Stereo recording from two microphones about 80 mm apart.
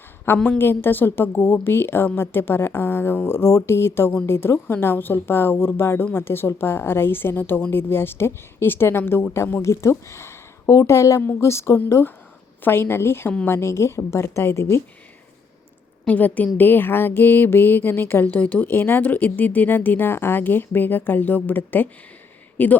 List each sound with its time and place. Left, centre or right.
0.3 s speech: left
16.0 s speech: centre